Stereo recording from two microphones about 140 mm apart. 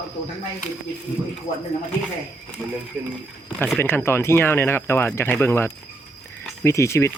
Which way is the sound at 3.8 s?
15° left (ahead or behind).